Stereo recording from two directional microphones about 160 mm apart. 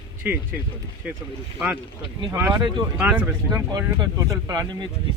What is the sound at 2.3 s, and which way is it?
Speech, 10° right (ahead or behind).